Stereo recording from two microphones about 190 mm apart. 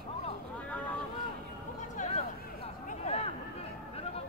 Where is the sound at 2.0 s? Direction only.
35° left (ahead or behind).